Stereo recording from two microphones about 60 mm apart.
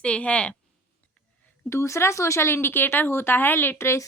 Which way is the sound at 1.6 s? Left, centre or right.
Left.